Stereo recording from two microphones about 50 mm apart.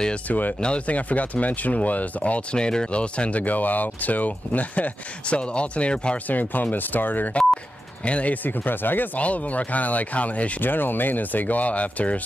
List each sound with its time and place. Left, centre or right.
0.3 s speech: left
0.6 s speech: left
6.2 s speech: left
7.3 s speech: left
9.2 s speech: left
10.6 s speech: left